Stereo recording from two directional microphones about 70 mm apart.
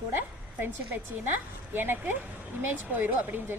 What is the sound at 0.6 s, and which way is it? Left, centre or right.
A woman's voice, right.